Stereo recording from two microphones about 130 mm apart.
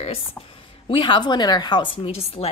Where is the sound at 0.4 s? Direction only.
45° left (ahead or behind).